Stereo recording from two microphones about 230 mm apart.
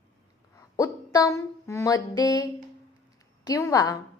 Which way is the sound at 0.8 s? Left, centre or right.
Centre.